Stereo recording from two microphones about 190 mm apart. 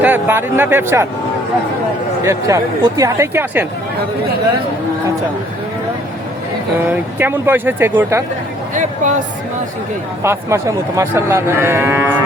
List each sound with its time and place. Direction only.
0.0 s speech: 10° right (ahead or behind)
2.2 s speech: 15° right (ahead or behind)
6.8 s speech: 10° right (ahead or behind)
8.7 s speech: 40° right (ahead or behind)
10.2 s speech: 15° right (ahead or behind)